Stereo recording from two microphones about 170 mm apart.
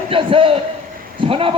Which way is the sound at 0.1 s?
30° right (ahead or behind).